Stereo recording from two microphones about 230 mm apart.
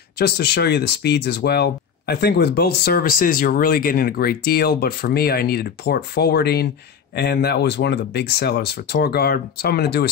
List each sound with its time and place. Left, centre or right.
0.2 s speech: left